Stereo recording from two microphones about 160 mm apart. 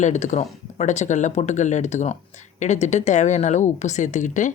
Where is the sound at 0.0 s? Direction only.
50° left (ahead or behind).